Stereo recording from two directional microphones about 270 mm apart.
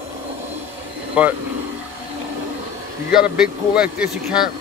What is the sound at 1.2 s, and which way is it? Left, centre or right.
Speech, centre.